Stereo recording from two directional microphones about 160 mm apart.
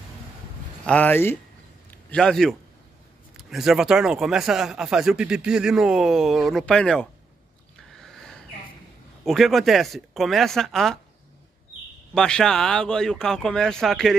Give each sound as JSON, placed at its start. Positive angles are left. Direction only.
{"t": 0.8, "sound": "speech", "side_deg": 10}
{"t": 7.9, "sound": "a sound", "side_deg": 0}
{"t": 9.2, "sound": "speech", "side_deg": 0}
{"t": 12.1, "sound": "speech", "side_deg": 5}